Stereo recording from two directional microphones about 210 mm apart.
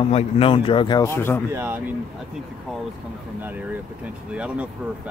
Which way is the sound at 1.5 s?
10° right (ahead or behind).